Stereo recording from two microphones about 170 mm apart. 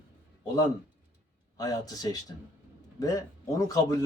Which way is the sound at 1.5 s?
20° left (ahead or behind).